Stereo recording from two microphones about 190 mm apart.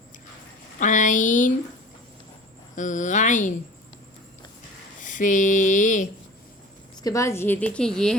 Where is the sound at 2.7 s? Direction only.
40° left (ahead or behind).